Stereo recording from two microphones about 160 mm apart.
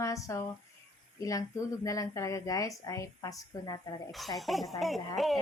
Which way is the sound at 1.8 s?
20° left (ahead or behind).